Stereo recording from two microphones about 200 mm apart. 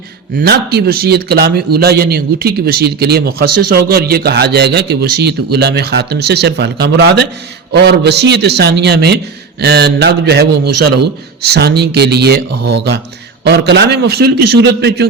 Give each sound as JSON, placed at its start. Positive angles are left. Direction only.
{"t": 0.3, "sound": "a man's voice", "side_deg": -55}